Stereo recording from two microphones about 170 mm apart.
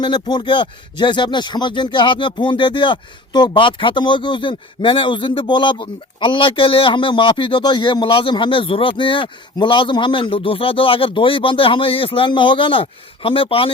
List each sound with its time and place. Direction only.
0.0 s speech: 25° left (ahead or behind)